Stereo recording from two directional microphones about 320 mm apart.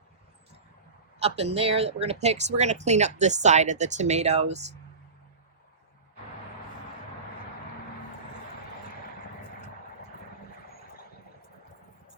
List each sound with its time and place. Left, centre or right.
1.2 s speech: centre